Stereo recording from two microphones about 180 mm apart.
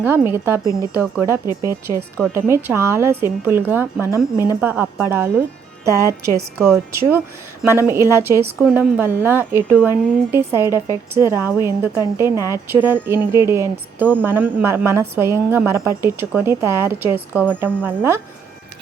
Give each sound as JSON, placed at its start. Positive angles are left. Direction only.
{"t": 0.0, "sound": "speech", "side_deg": -15}
{"t": 1.5, "sound": "speech", "side_deg": 20}
{"t": 2.3, "sound": "speech", "side_deg": -15}